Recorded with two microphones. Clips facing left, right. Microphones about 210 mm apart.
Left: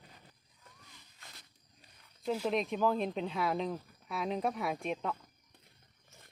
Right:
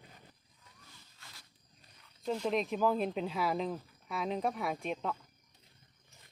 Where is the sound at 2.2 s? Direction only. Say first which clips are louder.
Even; 5° left (ahead or behind).